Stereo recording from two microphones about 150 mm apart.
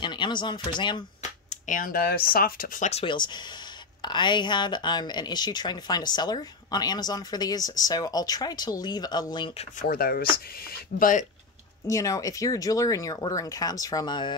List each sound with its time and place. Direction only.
0.0 s speech: 30° left (ahead or behind)
1.5 s speech: 65° left (ahead or behind)
2.9 s speech: 35° left (ahead or behind)
9.8 s speech: 80° left
10.6 s speech: 65° left (ahead or behind)
11.9 s speech: 20° left (ahead or behind)